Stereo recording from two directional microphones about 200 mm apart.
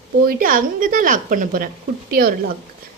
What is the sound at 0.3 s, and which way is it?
A woman's voice, 45° right (ahead or behind).